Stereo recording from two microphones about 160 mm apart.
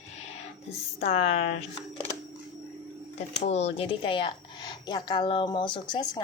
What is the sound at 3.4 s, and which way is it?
A woman's voice, 40° left (ahead or behind).